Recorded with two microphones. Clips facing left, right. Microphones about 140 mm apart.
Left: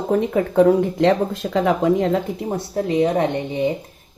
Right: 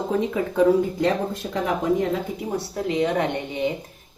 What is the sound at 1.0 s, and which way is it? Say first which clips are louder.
Speech: left 5 dB; 90° left.